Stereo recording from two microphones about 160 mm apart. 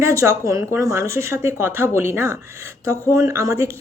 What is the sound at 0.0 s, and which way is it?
Speech, 20° right (ahead or behind).